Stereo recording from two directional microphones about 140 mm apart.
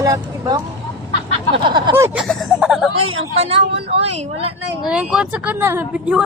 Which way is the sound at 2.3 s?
Centre (ahead or behind).